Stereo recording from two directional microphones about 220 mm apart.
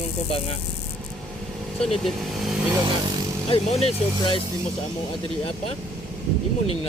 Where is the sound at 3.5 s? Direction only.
25° left (ahead or behind).